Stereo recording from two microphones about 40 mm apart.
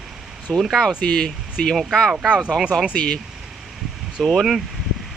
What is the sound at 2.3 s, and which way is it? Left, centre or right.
Speech, right.